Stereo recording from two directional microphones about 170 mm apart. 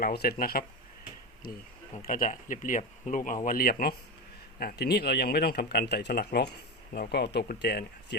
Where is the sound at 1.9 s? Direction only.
45° left (ahead or behind).